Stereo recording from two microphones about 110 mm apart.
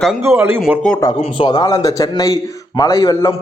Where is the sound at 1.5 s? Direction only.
40° left (ahead or behind).